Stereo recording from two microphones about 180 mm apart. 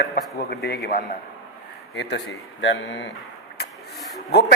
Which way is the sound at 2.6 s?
90° left.